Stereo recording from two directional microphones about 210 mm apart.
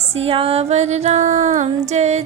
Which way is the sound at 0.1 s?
25° right (ahead or behind).